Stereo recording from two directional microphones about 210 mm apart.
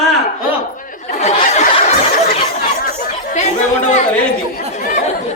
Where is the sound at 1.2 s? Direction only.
35° left (ahead or behind).